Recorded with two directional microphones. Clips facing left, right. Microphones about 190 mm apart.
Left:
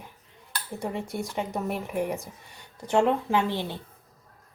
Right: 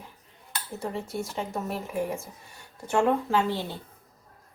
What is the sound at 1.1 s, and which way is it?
Speech, 15° left (ahead or behind).